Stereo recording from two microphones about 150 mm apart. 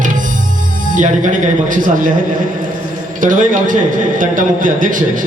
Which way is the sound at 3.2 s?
60° right (ahead or behind).